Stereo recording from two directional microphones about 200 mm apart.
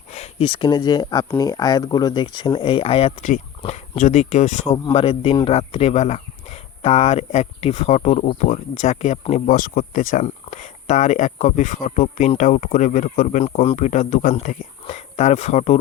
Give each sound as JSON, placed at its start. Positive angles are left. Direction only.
{"t": 0.1, "sound": "speech", "side_deg": 30}